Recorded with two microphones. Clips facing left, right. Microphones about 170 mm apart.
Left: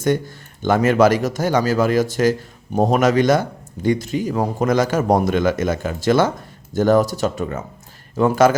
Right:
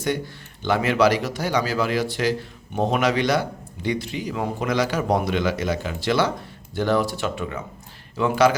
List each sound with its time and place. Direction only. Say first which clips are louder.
0.6 s speech: left 5 dB; 45° left (ahead or behind)